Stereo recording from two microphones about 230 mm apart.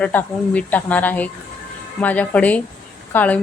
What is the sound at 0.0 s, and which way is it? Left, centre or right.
A woman's voice, centre.